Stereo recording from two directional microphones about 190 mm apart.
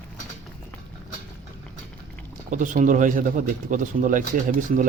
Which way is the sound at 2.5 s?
40° right (ahead or behind).